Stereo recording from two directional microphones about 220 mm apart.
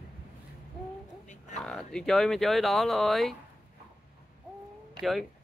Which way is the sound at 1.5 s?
5° left (ahead or behind).